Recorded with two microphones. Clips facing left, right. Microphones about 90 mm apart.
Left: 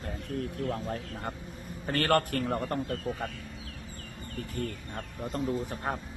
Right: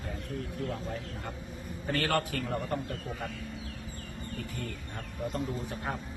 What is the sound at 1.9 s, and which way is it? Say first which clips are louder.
Speech: left 4 dB; 55° left (ahead or behind).